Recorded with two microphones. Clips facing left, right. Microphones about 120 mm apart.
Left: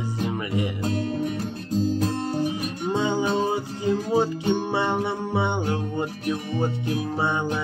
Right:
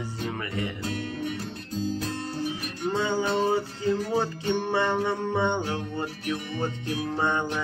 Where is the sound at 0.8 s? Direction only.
40° left (ahead or behind).